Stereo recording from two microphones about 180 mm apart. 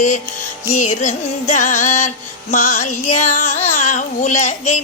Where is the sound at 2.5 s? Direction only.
45° left (ahead or behind).